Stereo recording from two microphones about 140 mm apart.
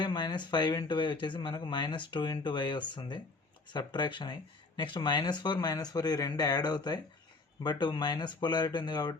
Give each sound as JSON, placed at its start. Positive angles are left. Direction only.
{"t": 0.0, "sound": "speech", "side_deg": 35}